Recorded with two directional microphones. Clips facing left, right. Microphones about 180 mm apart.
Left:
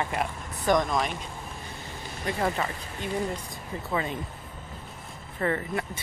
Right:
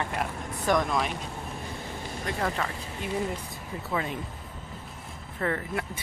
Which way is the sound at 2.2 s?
5° left (ahead or behind).